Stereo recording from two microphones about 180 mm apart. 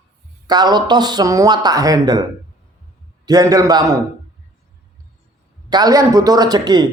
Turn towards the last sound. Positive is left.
turn(degrees=-25)  # may be behind; listen again after turning